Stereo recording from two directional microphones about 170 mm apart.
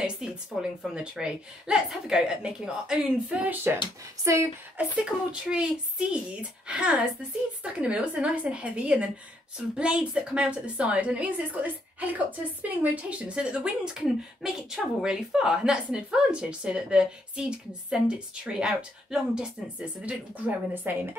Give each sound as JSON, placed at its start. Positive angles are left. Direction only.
{"t": 0.0, "sound": "a woman's voice", "side_deg": -5}
{"t": 4.9, "sound": "a woman's voice", "side_deg": -5}